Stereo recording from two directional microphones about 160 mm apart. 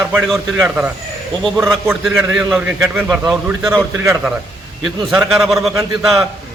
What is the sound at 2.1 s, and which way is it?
Speech, 15° right (ahead or behind).